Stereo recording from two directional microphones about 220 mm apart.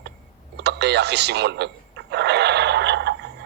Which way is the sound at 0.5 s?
50° right (ahead or behind).